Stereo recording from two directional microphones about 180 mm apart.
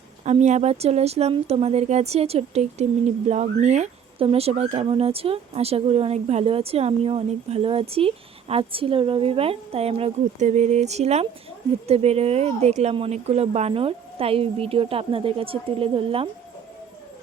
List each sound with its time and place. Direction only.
0.3 s speech: 40° right (ahead or behind)